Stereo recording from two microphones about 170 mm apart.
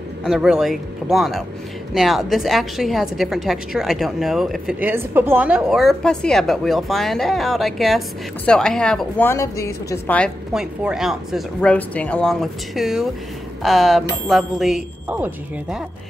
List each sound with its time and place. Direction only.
0.2 s a woman's voice: 5° right (ahead or behind)
9.3 s a woman's voice: 15° left (ahead or behind)
10.1 s a woman's voice: centre (ahead or behind)